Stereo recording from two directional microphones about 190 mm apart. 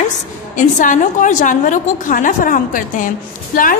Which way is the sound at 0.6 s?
40° left (ahead or behind).